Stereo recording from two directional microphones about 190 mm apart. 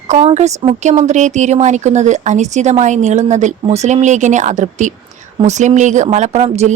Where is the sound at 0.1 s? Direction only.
35° right (ahead or behind).